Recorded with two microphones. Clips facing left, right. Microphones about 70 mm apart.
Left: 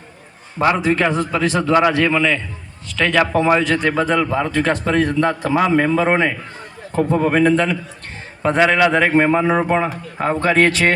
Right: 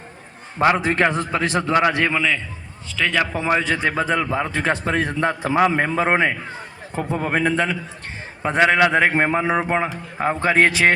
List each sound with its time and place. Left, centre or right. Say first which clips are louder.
0.8 s a man's voice: left 2 dB; right